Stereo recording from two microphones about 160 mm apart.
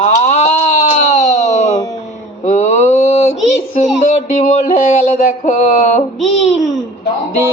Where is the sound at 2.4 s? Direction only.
45° left (ahead or behind).